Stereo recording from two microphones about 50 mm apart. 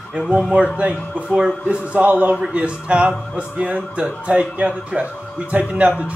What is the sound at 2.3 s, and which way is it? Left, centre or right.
Speech, right.